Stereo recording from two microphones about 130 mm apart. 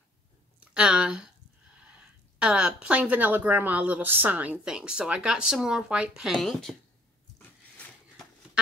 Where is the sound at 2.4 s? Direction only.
10° right (ahead or behind).